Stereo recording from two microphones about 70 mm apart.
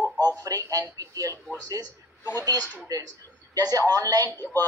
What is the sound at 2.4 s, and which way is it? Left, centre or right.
Speech, right.